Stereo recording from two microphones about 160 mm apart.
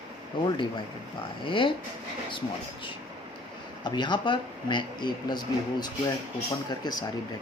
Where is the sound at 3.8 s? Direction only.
30° left (ahead or behind).